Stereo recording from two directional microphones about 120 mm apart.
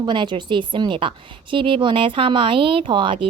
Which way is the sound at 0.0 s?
40° right (ahead or behind).